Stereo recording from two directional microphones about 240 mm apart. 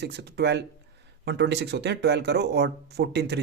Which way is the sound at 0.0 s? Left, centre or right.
Right.